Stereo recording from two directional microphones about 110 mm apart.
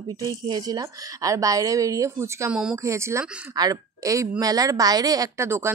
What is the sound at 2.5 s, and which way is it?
Speech, 5° right (ahead or behind).